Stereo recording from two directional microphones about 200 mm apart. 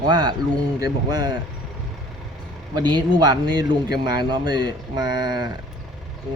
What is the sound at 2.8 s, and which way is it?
A man's voice, 20° right (ahead or behind).